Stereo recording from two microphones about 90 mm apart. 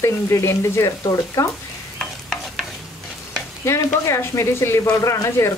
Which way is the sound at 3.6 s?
35° left (ahead or behind).